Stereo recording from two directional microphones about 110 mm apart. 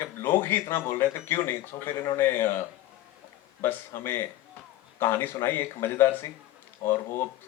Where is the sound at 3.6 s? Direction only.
20° left (ahead or behind).